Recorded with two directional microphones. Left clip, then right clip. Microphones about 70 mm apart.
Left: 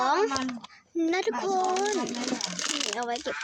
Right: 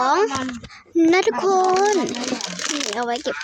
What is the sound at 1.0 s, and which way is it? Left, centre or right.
Speech, right.